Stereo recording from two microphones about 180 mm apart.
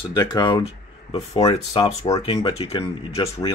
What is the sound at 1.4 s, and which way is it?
Speech, 20° left (ahead or behind).